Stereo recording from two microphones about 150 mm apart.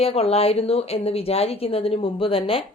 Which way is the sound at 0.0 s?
40° left (ahead or behind).